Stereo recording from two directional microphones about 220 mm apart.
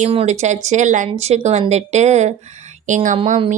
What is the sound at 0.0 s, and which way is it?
Speech, 30° right (ahead or behind).